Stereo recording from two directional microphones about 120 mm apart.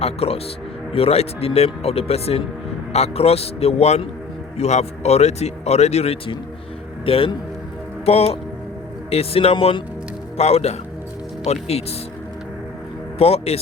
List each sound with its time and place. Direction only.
0.0 s a man's voice: 55° left (ahead or behind)
13.1 s speech: 60° left (ahead or behind)